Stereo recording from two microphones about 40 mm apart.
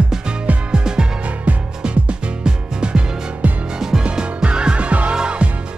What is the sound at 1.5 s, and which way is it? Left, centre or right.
Music, right.